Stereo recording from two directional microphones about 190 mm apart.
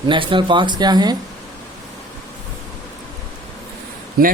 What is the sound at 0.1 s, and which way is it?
Speech, 25° right (ahead or behind).